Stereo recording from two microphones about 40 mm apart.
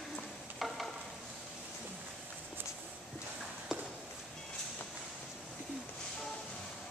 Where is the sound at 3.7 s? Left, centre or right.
Centre.